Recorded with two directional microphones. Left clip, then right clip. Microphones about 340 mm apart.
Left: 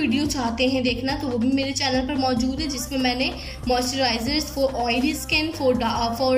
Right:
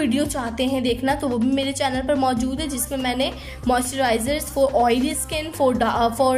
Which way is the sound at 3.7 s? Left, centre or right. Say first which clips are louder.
Right 1 dB; right.